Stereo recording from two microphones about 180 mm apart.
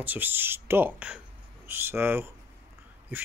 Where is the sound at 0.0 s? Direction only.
10° right (ahead or behind).